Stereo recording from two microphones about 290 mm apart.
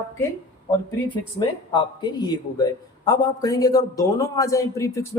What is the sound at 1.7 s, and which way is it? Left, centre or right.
A man's voice, centre.